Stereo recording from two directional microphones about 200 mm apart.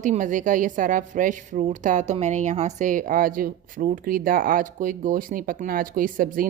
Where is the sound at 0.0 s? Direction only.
40° right (ahead or behind).